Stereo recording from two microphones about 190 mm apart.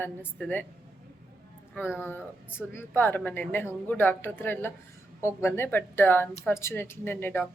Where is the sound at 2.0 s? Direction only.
10° left (ahead or behind).